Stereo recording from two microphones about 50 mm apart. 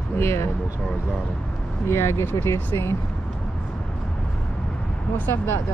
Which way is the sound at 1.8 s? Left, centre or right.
Left.